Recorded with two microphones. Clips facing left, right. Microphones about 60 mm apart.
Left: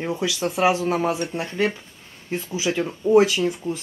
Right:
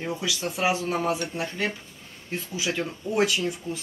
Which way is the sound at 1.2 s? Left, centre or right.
Left.